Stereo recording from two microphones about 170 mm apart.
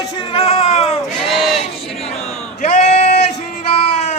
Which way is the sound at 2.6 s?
40° left (ahead or behind).